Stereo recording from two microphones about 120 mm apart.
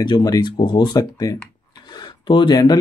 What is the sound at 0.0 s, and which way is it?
Speech, 35° left (ahead or behind).